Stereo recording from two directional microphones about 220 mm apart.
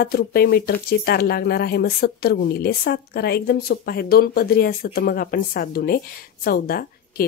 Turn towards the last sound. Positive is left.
turn(degrees=45)  # may be behind; listen again after turning